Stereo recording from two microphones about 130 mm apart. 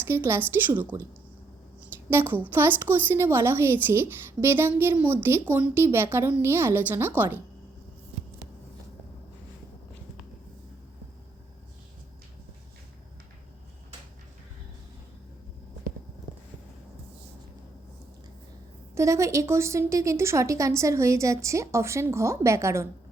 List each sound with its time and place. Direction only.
0.1 s a woman's voice: 15° right (ahead or behind)
2.0 s a woman's voice: 15° right (ahead or behind)
18.9 s a woman's voice: 25° right (ahead or behind)